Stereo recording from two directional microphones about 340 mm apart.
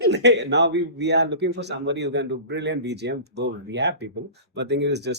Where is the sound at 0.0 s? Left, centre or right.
Right.